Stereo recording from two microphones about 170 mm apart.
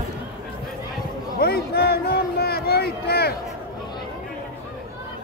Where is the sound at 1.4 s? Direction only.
65° left (ahead or behind).